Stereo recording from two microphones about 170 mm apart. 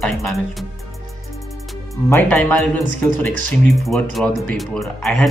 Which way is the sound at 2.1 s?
10° left (ahead or behind).